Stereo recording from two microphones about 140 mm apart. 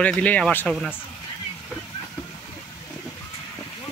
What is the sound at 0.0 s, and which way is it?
Speech, 10° left (ahead or behind).